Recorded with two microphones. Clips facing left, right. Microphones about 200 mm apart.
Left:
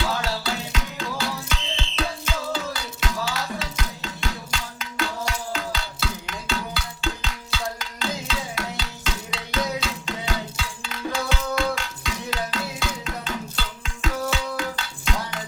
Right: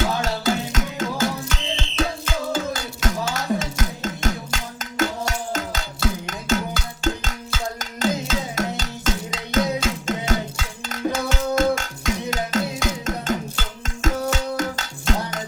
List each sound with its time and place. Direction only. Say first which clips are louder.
0.0 s music: right 4 dB; 45° right (ahead or behind)